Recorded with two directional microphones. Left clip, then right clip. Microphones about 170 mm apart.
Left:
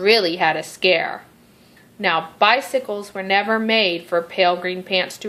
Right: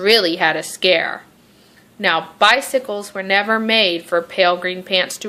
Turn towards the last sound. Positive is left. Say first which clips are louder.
# right 3 dB
turn(degrees=-15)  # may be behind; listen again after turning